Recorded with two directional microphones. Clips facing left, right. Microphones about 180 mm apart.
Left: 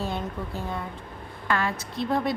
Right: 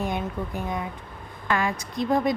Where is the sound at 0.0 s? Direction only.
15° right (ahead or behind).